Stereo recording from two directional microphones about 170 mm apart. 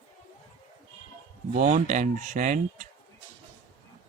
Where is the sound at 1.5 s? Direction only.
45° right (ahead or behind).